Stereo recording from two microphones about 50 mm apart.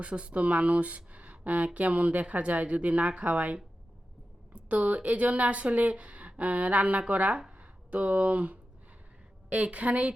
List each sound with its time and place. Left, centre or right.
0.0 s speech: right